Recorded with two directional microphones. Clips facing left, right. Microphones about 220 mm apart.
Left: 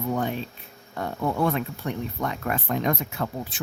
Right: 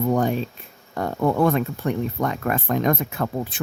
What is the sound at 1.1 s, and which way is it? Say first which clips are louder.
Speech: right 5 dB; 90° right.